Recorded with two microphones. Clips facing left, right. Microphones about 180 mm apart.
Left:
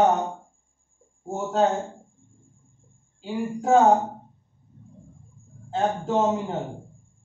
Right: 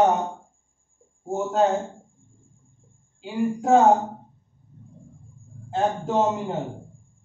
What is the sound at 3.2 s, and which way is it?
Speech, centre (ahead or behind).